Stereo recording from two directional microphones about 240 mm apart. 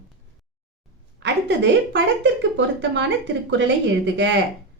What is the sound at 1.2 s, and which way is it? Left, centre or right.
A woman's voice, right.